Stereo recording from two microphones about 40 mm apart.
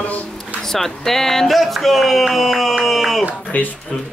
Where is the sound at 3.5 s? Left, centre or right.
Left.